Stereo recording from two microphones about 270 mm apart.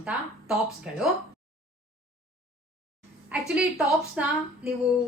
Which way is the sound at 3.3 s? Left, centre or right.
Centre.